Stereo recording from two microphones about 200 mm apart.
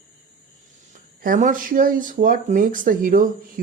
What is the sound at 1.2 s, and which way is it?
Speech, 40° right (ahead or behind).